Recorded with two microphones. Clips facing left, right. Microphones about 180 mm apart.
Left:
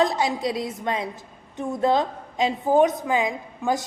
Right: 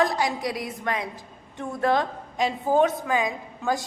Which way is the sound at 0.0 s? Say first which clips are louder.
Left 2 dB; 25° left (ahead or behind).